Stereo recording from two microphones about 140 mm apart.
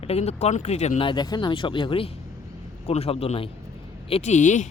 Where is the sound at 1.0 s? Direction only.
30° left (ahead or behind).